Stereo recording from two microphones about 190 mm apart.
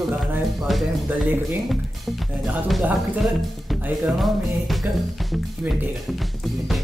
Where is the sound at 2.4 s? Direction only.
Centre (ahead or behind).